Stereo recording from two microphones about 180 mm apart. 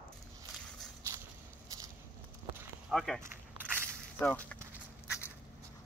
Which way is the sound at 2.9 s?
Centre (ahead or behind).